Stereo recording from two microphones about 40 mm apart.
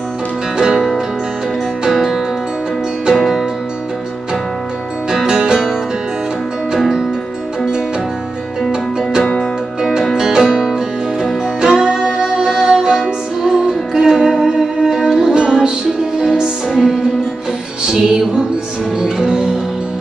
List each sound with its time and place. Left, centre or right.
0.6 s music: centre
1.9 s music: centre
5.1 s music: centre
6.8 s music: centre
9.4 s music: centre
17.8 s music: centre